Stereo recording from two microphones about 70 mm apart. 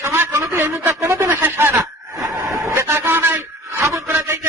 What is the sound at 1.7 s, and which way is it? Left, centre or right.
Snicker, right.